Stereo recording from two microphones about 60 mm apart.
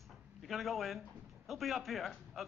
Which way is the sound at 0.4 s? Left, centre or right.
Centre.